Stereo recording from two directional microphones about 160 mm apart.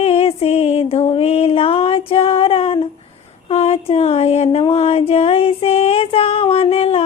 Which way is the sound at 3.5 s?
40° left (ahead or behind).